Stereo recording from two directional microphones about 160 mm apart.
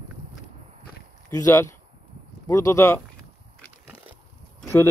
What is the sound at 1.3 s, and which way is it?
Speech, 20° left (ahead or behind).